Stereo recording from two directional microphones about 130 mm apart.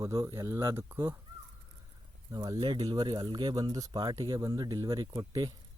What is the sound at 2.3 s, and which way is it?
Speech, 35° right (ahead or behind).